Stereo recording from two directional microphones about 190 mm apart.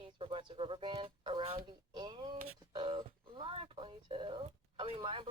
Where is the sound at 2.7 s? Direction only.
25° right (ahead or behind).